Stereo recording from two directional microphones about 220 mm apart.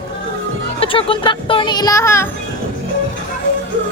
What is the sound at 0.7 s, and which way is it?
Speech, 25° left (ahead or behind).